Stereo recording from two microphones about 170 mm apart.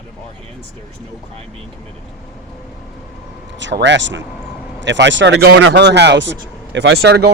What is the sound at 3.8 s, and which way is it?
Speech, 90° right.